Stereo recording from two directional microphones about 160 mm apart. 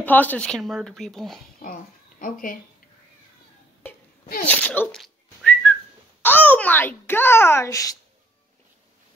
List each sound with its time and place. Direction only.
0.0 s speech: 10° left (ahead or behind)
1.6 s speech: 60° left (ahead or behind)
4.5 s whistling: 10° left (ahead or behind)
6.2 s a child's voice: 10° left (ahead or behind)